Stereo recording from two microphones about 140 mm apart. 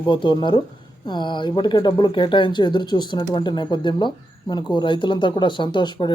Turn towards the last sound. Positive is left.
turn(degrees=35)  # may be behind; listen again after turning